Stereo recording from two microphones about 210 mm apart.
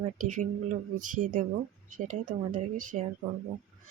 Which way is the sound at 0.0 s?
35° right (ahead or behind).